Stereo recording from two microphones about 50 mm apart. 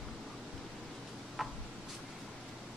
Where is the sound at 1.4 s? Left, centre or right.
Centre.